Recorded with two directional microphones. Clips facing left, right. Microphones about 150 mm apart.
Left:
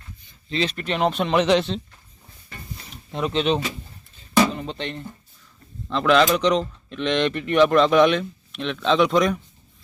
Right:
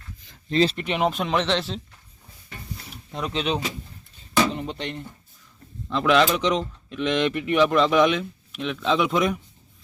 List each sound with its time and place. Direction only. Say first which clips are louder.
0.5 s speech: right 4 dB; 35° right (ahead or behind)
0.8 s speech: left 1 dB; 15° right (ahead or behind)
1.0 s speech: left 4 dB; centre (ahead or behind)
2.9 s speech: left 5 dB; centre (ahead or behind)
4.7 s speech: left 1 dB; 10° right (ahead or behind)